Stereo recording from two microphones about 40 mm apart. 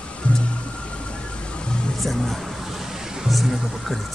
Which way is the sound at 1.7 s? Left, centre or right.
Left.